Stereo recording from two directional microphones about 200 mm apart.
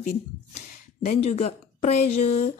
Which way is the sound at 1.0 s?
30° left (ahead or behind).